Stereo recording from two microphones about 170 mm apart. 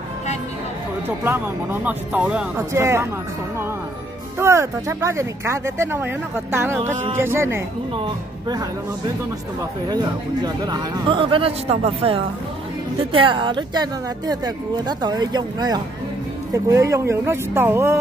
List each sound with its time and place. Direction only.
1.0 s speech: 10° right (ahead or behind)
4.4 s speech: 15° right (ahead or behind)
6.8 s a man's voice: 40° right (ahead or behind)
7.2 s speech: 15° right (ahead or behind)
7.9 s speech: 25° right (ahead or behind)
10.4 s a man's voice: 25° right (ahead or behind)